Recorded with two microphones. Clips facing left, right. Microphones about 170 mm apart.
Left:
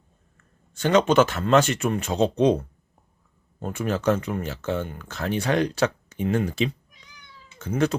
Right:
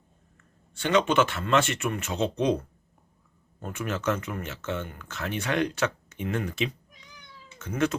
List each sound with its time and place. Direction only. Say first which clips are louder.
0.7 s speech: left 4 dB; 40° left (ahead or behind)
3.6 s speech: left 5 dB; 35° left (ahead or behind)